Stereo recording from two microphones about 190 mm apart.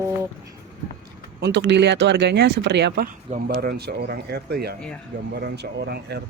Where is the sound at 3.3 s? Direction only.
45° right (ahead or behind).